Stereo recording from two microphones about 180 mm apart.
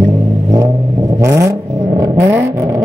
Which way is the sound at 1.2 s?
15° right (ahead or behind).